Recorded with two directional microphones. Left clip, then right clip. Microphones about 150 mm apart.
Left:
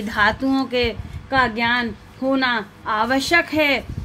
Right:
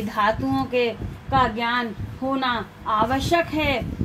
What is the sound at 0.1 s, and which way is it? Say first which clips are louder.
A woman's voice: left 3 dB; 50° left (ahead or behind).